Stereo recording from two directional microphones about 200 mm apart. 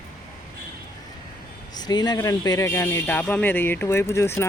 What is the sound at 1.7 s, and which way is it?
A man's voice, 20° left (ahead or behind).